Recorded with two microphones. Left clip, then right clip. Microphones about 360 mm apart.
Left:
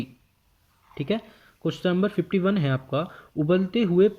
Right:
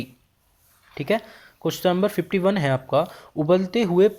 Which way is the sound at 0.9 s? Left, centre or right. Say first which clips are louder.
Right 5 dB; centre.